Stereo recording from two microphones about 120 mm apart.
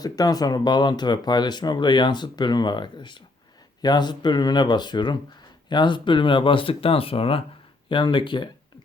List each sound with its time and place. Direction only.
0.0 s speech: 30° left (ahead or behind)